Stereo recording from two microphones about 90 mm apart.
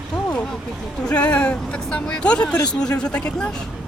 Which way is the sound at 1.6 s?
5° left (ahead or behind).